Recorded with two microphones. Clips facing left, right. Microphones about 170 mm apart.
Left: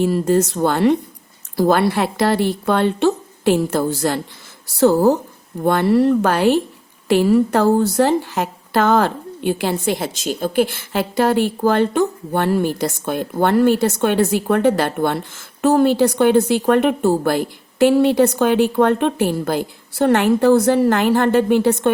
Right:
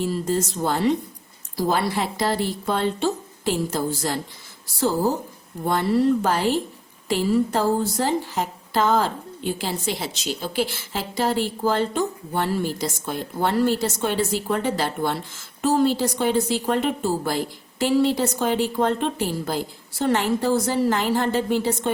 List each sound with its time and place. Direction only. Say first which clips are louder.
0.0 s a woman's voice: left 7 dB; 65° left (ahead or behind)